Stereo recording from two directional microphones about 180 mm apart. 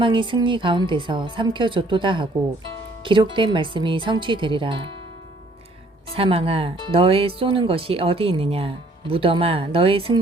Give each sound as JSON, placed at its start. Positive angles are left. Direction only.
{"t": 0.0, "sound": "a woman's voice", "side_deg": -30}
{"t": 6.1, "sound": "speech", "side_deg": -30}